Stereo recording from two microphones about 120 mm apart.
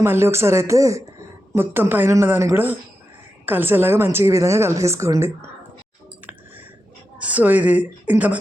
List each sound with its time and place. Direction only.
0.0 s a woman's voice: 20° right (ahead or behind)
7.2 s speech: 10° right (ahead or behind)